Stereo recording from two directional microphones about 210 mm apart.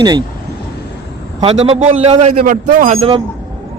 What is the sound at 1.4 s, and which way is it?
Speech, 30° right (ahead or behind).